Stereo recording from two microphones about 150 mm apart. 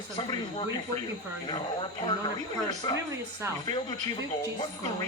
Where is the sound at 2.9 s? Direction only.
25° left (ahead or behind).